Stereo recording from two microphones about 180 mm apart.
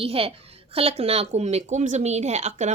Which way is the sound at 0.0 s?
30° right (ahead or behind).